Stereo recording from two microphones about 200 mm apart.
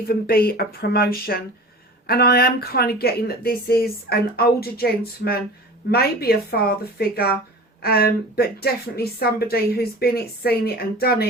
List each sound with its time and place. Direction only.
0.1 s a woman's voice: 50° left (ahead or behind)